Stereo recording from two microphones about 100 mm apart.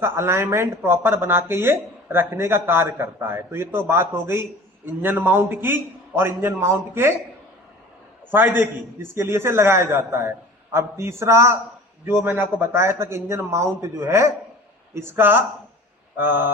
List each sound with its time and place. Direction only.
0.0 s speech: 25° right (ahead or behind)
8.3 s speech: 20° right (ahead or behind)